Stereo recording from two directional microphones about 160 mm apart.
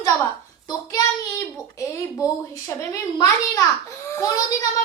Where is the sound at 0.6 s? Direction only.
20° left (ahead or behind).